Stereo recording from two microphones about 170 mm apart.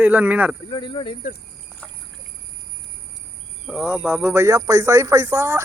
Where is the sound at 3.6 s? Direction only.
5° right (ahead or behind).